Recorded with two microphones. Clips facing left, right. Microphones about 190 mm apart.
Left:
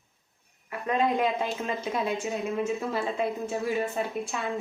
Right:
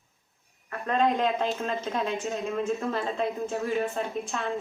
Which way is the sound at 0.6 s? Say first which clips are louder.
Right 1 dB; 10° left (ahead or behind).